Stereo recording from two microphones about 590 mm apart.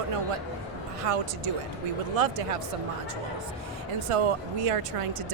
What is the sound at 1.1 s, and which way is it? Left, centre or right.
Speech, right.